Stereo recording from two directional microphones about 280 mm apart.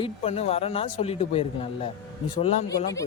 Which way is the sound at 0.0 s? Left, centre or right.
Left.